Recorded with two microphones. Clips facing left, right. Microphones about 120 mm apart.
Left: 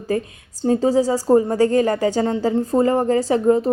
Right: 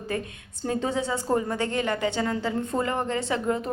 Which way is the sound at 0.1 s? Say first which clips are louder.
Left 9 dB; 35° left (ahead or behind).